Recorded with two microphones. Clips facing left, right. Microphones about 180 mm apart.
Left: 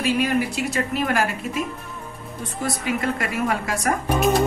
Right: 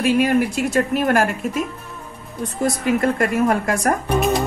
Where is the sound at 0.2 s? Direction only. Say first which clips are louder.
Right 4 dB; 50° right (ahead or behind).